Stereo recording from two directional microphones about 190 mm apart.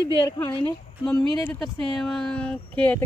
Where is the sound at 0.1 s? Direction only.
25° left (ahead or behind).